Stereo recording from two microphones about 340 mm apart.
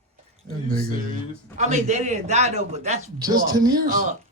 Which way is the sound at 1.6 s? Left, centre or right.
Centre.